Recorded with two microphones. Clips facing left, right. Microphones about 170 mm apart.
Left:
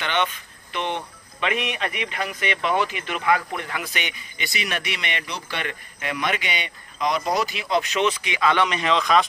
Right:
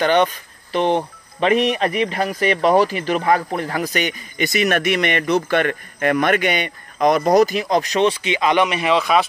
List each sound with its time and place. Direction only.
0.0 s speech: 40° right (ahead or behind); by 9.3 s 5° right (ahead or behind)